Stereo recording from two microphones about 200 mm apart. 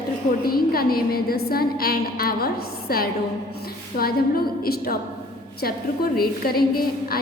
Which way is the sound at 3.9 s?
50° left (ahead or behind).